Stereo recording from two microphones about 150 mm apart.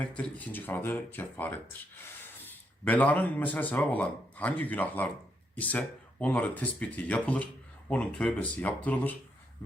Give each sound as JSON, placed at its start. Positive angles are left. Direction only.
{"t": 0.0, "sound": "speech", "side_deg": 10}